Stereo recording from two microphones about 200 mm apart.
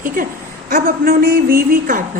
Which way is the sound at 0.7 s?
45° right (ahead or behind).